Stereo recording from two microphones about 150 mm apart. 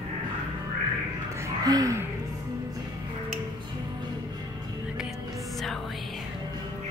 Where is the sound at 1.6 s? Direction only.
25° right (ahead or behind).